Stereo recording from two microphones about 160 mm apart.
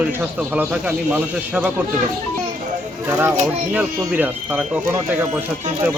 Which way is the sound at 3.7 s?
10° right (ahead or behind).